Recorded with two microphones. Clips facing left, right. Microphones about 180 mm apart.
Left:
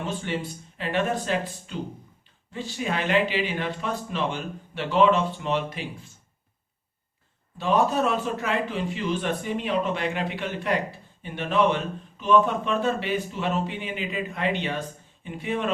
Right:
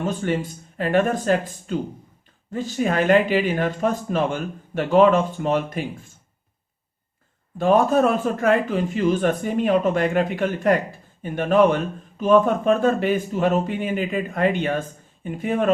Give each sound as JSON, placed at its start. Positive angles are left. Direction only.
{"t": 0.0, "sound": "speech", "side_deg": -45}
{"t": 7.6, "sound": "speech", "side_deg": -50}